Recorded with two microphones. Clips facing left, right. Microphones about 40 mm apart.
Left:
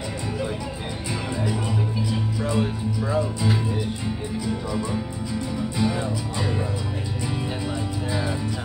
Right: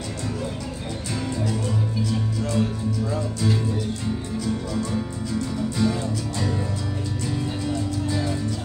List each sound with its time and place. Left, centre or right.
1.4 s music: centre
7.3 s music: centre